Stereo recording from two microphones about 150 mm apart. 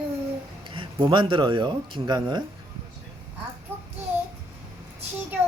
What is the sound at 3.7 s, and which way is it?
Child singing, 15° right (ahead or behind).